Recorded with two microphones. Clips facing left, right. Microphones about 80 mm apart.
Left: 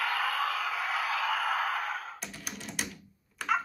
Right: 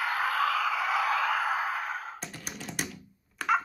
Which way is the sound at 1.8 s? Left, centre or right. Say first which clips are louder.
Right 1 dB; right.